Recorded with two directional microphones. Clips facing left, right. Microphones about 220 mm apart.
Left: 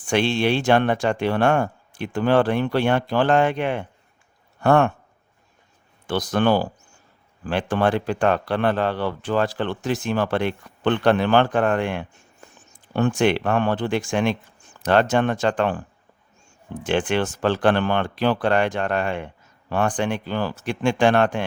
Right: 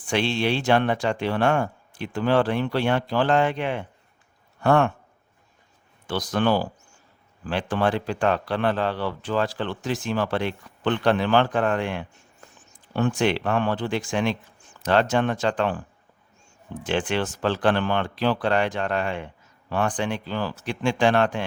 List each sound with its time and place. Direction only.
0.1 s speech: 50° left (ahead or behind)
6.1 s speech: 55° left (ahead or behind)
16.8 s speech: 50° left (ahead or behind)